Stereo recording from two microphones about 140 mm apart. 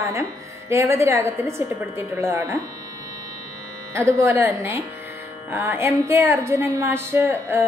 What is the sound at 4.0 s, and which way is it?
A woman's voice, 20° right (ahead or behind).